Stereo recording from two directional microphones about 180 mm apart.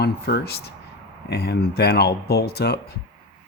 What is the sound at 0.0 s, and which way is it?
Speech, 65° left (ahead or behind).